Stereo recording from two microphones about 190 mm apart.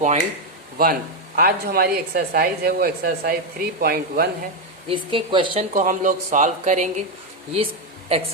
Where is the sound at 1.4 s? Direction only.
50° right (ahead or behind).